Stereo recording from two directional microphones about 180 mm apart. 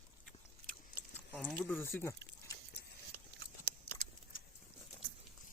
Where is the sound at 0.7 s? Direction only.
10° left (ahead or behind).